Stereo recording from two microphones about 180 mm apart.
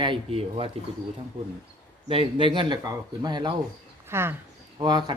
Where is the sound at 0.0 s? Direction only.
30° right (ahead or behind).